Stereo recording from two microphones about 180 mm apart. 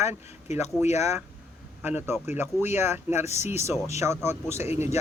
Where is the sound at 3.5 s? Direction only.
15° right (ahead or behind).